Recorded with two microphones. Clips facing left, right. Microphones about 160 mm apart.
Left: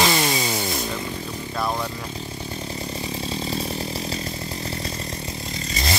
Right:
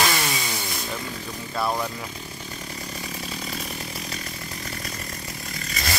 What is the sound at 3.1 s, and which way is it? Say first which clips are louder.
Chainsaw: left 7 dB; 25° left (ahead or behind).